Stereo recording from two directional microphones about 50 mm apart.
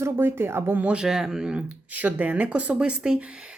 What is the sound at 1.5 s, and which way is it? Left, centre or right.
Speech, right.